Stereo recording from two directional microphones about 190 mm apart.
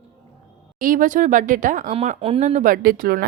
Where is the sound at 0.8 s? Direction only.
45° right (ahead or behind).